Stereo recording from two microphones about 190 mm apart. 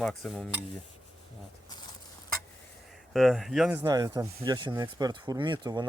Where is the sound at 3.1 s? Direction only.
Centre (ahead or behind).